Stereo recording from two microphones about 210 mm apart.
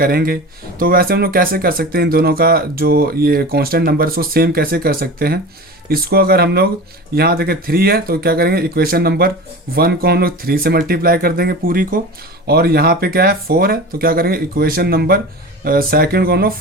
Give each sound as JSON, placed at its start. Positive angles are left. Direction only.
{"t": 0.0, "sound": "speech", "side_deg": -45}